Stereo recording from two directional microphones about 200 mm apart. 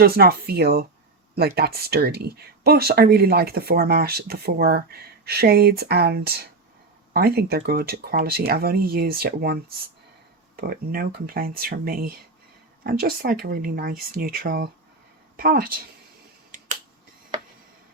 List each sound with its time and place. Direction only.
0.0 s speech: 50° right (ahead or behind)
10.6 s speech: 50° right (ahead or behind)